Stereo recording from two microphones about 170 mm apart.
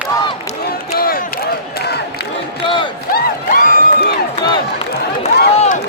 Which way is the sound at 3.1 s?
60° left (ahead or behind).